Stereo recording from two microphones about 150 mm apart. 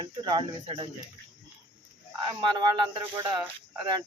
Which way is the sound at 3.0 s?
30° right (ahead or behind).